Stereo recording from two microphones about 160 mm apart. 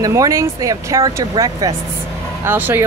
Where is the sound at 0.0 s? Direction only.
20° right (ahead or behind).